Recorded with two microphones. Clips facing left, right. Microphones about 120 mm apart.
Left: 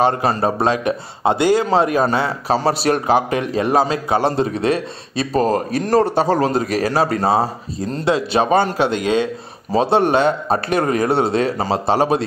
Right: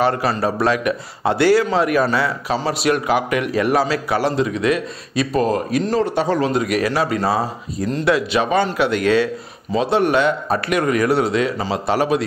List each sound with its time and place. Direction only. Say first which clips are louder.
0.4 s a man's voice: left 1 dB; 25° left (ahead or behind)
2.4 s a man's voice: left 2 dB; 35° left (ahead or behind); by 9.8 s 20° left (ahead or behind)
9.8 s speech: left 2 dB; 30° left (ahead or behind)